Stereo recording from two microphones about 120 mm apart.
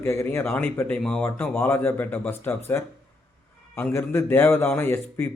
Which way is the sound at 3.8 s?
20° left (ahead or behind).